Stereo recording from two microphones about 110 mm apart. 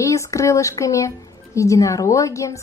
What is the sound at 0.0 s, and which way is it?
A woman's voice, 30° left (ahead or behind).